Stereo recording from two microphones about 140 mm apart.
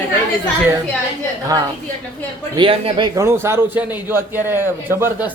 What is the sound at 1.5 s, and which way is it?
A woman's voice, 25° right (ahead or behind).